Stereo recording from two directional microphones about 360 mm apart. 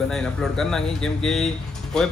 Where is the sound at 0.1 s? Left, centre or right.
Centre.